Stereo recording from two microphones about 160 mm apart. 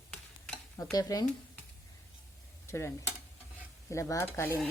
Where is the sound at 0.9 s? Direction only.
25° left (ahead or behind).